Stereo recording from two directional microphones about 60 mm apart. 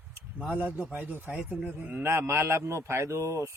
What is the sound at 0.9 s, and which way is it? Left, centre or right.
Speech, right.